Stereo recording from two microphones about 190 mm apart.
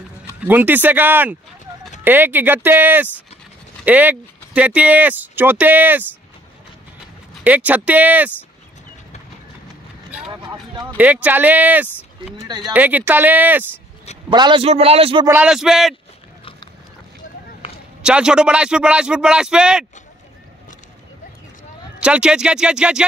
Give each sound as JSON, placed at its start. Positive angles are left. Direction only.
{"t": 0.4, "sound": "speech", "side_deg": -10}
{"t": 7.4, "sound": "speech", "side_deg": -10}
{"t": 10.3, "sound": "speech", "side_deg": -20}
{"t": 11.0, "sound": "speech", "side_deg": -10}
{"t": 12.4, "sound": "speech", "side_deg": -20}
{"t": 12.7, "sound": "speech", "side_deg": -10}
{"t": 14.3, "sound": "a man's voice", "side_deg": -25}
{"t": 15.2, "sound": "a man's voice", "side_deg": -5}
{"t": 18.0, "sound": "a man's voice", "side_deg": -5}
{"t": 22.0, "sound": "a man's voice", "side_deg": -5}